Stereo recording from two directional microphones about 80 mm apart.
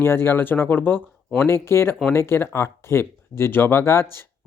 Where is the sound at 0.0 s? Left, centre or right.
Left.